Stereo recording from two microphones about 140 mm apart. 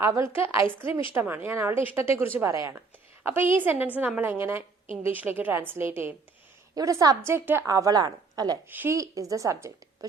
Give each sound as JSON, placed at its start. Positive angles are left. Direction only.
{"t": 0.0, "sound": "a woman's voice", "side_deg": -20}
{"t": 7.7, "sound": "a woman's voice", "side_deg": -25}
{"t": 8.7, "sound": "a woman's voice", "side_deg": -15}